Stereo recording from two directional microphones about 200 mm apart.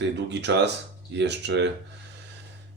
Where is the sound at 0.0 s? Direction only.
60° right (ahead or behind).